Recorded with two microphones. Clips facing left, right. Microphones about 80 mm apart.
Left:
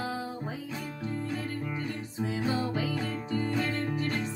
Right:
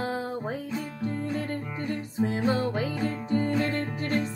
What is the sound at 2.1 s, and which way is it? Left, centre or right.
Music, right.